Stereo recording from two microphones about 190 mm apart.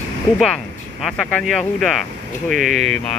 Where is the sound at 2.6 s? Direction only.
40° right (ahead or behind).